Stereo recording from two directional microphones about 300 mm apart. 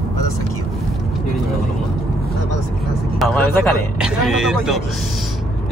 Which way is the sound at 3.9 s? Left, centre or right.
Centre.